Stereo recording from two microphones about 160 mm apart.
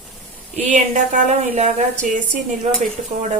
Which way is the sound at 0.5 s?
50° right (ahead or behind).